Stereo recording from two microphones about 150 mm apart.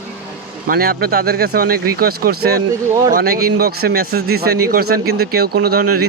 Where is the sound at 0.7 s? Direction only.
85° right.